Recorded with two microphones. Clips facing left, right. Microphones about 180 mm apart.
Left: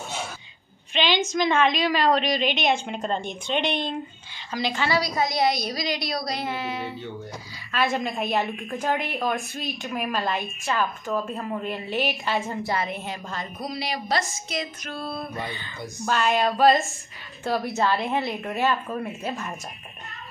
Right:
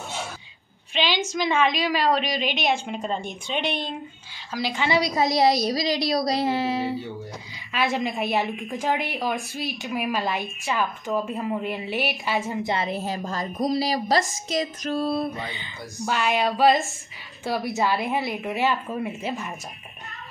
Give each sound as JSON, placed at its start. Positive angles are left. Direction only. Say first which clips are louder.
{"t": 0.9, "sound": "a sound", "louder": "left 1 dB", "side_deg": -5}
{"t": 1.3, "sound": "a woman's voice", "louder": "even", "side_deg": -5}
{"t": 4.8, "sound": "a woman's voice", "louder": "right 4 dB", "side_deg": -20}
{"t": 8.1, "sound": "a woman's voice", "louder": "right 1 dB", "side_deg": -5}
{"t": 12.7, "sound": "a woman's voice", "louder": "right 2 dB", "side_deg": -30}
{"t": 15.3, "sound": "a woman's voice", "louder": "left 1 dB", "side_deg": -20}
{"t": 16.4, "sound": "a woman's voice", "louder": "even", "side_deg": 0}